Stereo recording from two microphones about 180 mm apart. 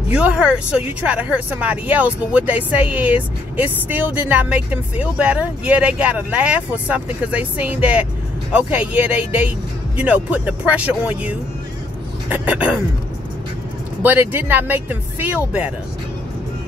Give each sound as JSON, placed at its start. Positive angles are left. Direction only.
{"t": 0.1, "sound": "speech", "side_deg": -5}
{"t": 14.0, "sound": "speech", "side_deg": -10}